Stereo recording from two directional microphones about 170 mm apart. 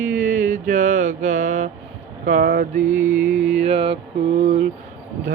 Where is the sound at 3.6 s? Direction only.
35° right (ahead or behind).